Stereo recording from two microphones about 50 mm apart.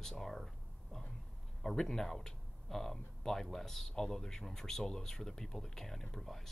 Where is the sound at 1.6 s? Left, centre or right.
Centre.